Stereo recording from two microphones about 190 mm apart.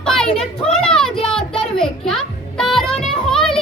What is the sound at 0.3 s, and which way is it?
Children playing, 5° left (ahead or behind).